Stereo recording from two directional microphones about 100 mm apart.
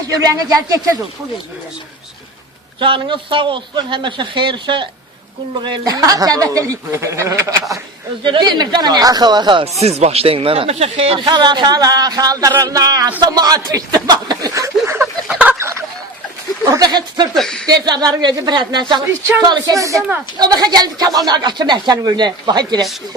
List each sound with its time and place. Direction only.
0.1 s speech: 35° right (ahead or behind)
2.7 s a man's voice: 60° right (ahead or behind); by 7.5 s 30° right (ahead or behind)
8.2 s speech: 50° right (ahead or behind)
9.7 s speech: 90° right
11.3 s speech: 50° right (ahead or behind)
13.1 s speech: 50° right (ahead or behind); by 15.0 s 30° right (ahead or behind)
15.0 s a sound: 10° right (ahead or behind)
15.5 s fowl: 30° right (ahead or behind)
16.6 s speech: 40° right (ahead or behind)
17.3 s speech: 5° left (ahead or behind)
17.7 s speech: 40° right (ahead or behind)